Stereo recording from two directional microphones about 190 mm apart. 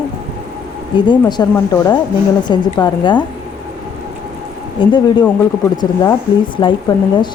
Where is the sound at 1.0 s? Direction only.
25° left (ahead or behind).